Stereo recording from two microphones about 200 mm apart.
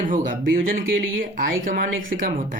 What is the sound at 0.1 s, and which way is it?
Speech, 45° right (ahead or behind).